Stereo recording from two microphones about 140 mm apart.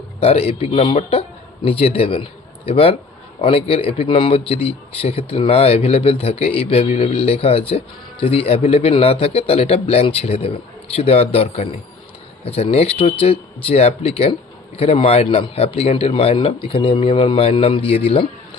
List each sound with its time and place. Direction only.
0.2 s speech: 45° left (ahead or behind)